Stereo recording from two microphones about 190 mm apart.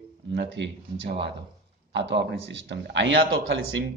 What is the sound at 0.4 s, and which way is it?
A man's voice, 65° right (ahead or behind).